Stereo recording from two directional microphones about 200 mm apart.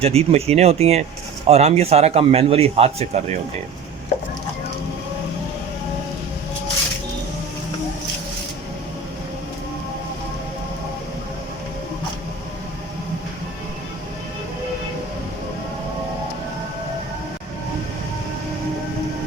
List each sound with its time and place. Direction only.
0.0 s a man's voice: 30° right (ahead or behind)